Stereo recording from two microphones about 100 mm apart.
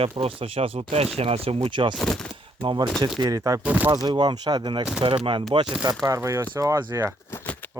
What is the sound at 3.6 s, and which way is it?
Speech, 15° right (ahead or behind).